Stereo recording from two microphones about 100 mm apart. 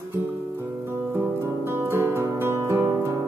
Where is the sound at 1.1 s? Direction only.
25° right (ahead or behind).